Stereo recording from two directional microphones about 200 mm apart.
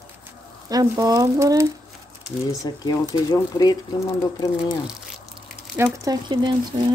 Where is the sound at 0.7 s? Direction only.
20° right (ahead or behind).